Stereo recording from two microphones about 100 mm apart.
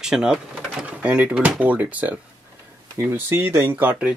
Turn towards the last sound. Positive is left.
turn(degrees=-15)  # may be behind; listen again after turning